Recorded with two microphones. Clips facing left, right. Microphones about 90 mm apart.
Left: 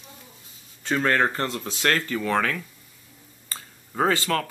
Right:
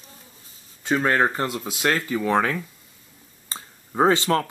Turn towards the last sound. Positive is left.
turn(degrees=-25)  # may be behind; listen again after turning